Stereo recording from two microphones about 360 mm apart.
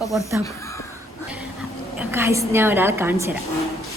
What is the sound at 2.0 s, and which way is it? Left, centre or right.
A woman's voice, centre.